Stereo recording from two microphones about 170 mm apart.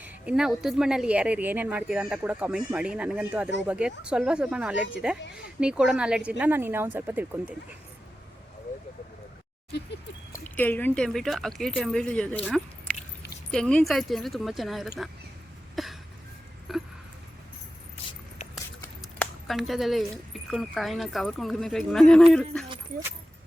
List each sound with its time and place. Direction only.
0.0 s speech: 5° right (ahead or behind)
10.5 s speech: 10° left (ahead or behind)
13.5 s speech: 5° left (ahead or behind)
15.7 s cough: centre (ahead or behind)
16.7 s a sound: centre (ahead or behind)
18.4 s a sound: 40° left (ahead or behind)
19.2 s speech: centre (ahead or behind)